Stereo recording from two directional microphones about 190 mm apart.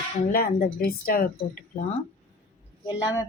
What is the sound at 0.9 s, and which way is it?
Speech, 50° left (ahead or behind).